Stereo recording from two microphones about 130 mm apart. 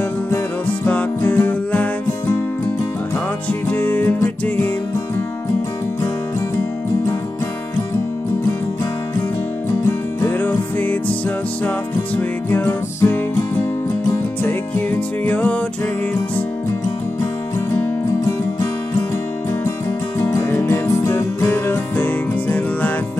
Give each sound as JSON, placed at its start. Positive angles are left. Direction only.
{"t": 0.8, "sound": "music", "side_deg": 10}
{"t": 3.4, "sound": "music", "side_deg": 10}
{"t": 9.8, "sound": "music", "side_deg": 15}
{"t": 20.2, "sound": "music", "side_deg": 20}